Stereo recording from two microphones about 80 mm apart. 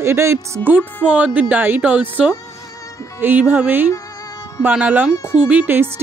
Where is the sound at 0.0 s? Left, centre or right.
Right.